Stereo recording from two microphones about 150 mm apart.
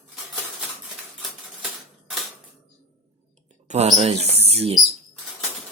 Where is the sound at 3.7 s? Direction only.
50° right (ahead or behind).